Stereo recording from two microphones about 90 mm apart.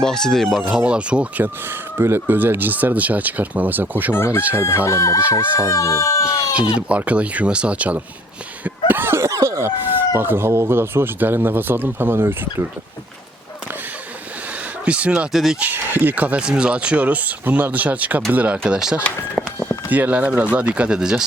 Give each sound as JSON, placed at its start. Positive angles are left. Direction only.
{"t": 0.0, "sound": "speech", "side_deg": 5}
{"t": 0.8, "sound": "speech", "side_deg": -10}
{"t": 2.0, "sound": "speech", "side_deg": -25}
{"t": 4.1, "sound": "speech", "side_deg": 25}
{"t": 6.7, "sound": "speech", "side_deg": -15}
{"t": 8.9, "sound": "a sound", "side_deg": -25}
{"t": 10.2, "sound": "speech", "side_deg": -25}
{"t": 14.8, "sound": "speech", "side_deg": -15}
{"t": 15.3, "sound": "speech", "side_deg": 0}
{"t": 15.6, "sound": "speech", "side_deg": -20}
{"t": 19.9, "sound": "speech", "side_deg": -20}